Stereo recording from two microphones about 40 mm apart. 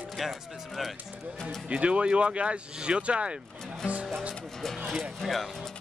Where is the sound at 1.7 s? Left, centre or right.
Right.